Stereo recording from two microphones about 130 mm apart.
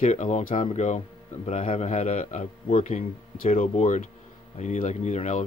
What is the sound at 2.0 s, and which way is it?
Speech, 85° left.